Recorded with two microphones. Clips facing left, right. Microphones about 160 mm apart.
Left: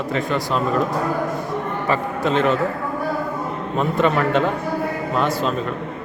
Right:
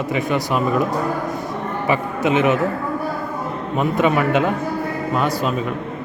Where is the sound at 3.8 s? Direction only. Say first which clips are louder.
Right 1 dB; 10° right (ahead or behind).